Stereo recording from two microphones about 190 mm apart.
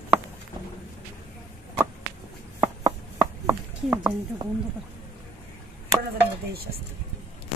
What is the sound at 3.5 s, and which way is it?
Chopping, 10° right (ahead or behind).